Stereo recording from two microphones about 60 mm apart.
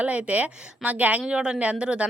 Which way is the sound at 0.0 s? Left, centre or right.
Right.